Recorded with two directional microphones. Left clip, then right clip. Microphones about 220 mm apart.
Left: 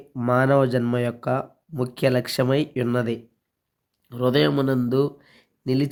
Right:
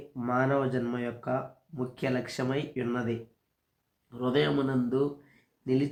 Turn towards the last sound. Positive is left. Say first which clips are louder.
# left 4 dB
turn(degrees=55)  # may be behind; listen again after turning